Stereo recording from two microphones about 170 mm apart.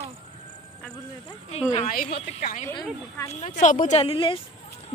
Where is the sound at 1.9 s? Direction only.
60° left (ahead or behind).